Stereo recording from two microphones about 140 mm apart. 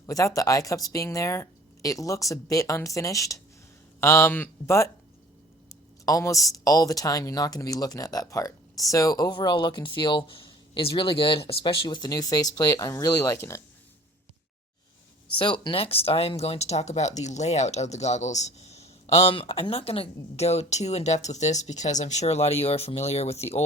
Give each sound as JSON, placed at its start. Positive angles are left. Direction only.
{"t": 0.0, "sound": "speech", "side_deg": 25}
{"t": 15.4, "sound": "speech", "side_deg": 35}